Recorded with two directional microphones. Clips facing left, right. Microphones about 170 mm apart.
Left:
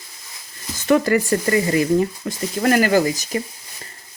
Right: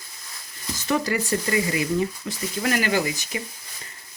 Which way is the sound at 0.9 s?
50° left (ahead or behind).